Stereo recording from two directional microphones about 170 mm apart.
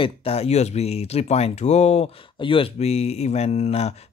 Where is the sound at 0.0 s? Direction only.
35° left (ahead or behind).